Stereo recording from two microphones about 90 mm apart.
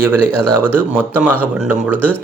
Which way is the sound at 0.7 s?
20° right (ahead or behind).